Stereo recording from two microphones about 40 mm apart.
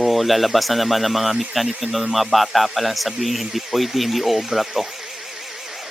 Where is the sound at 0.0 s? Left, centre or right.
Centre.